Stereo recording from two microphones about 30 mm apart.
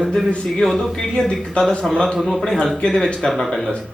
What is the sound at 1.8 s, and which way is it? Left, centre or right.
Speech, left.